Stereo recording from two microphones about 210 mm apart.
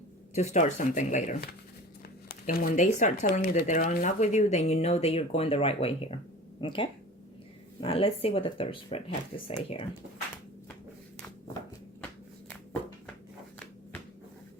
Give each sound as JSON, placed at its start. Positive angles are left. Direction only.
{"t": 0.3, "sound": "speech", "side_deg": 35}
{"t": 2.5, "sound": "speech", "side_deg": 45}